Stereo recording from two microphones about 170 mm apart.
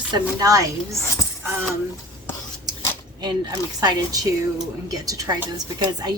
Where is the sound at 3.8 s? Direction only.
25° right (ahead or behind).